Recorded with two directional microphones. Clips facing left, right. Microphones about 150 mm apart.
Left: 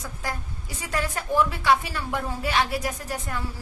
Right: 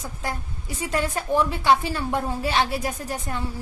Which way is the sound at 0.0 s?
25° right (ahead or behind).